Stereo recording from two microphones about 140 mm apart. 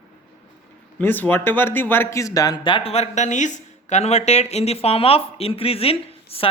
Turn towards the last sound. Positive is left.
turn(degrees=45)  # may be behind; listen again after turning